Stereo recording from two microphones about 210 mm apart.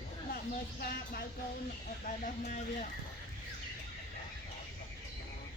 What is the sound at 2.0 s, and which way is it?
Speech, 40° left (ahead or behind).